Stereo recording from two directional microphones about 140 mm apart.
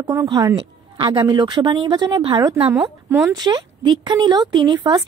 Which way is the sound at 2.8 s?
5° right (ahead or behind).